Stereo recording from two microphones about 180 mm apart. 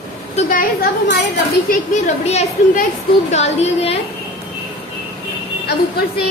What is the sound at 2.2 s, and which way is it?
A woman's voice, 35° left (ahead or behind).